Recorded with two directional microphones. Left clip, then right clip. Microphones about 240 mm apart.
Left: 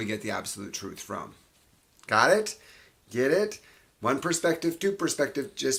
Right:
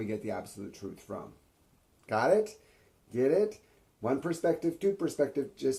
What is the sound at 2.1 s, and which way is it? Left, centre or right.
Speech, centre.